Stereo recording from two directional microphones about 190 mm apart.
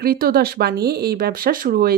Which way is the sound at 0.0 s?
50° right (ahead or behind).